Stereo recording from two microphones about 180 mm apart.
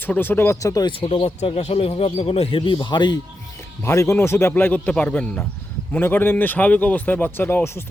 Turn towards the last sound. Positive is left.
turn(degrees=10)  # may be behind; listen again after turning